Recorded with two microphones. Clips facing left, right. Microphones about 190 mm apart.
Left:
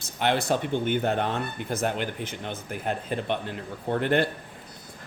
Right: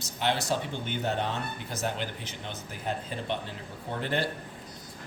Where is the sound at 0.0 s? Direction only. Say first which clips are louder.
Left 4 dB; 55° left (ahead or behind).